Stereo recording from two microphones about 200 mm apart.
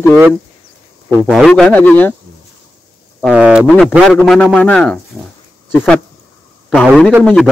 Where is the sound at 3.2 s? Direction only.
5° right (ahead or behind).